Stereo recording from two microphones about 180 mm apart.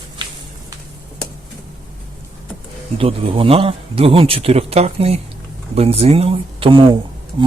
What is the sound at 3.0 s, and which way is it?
Speech, 30° right (ahead or behind).